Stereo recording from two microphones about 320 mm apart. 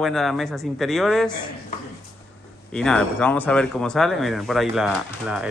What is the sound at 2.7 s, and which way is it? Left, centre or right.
Speech, centre.